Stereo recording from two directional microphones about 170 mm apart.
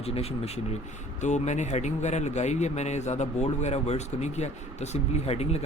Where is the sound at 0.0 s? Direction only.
35° left (ahead or behind).